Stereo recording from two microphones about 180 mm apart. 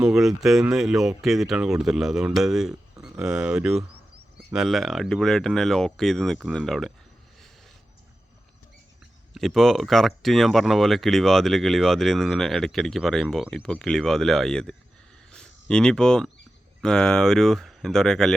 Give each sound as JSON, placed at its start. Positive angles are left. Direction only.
{"t": 0.0, "sound": "speech", "side_deg": 0}
{"t": 9.3, "sound": "speech", "side_deg": 0}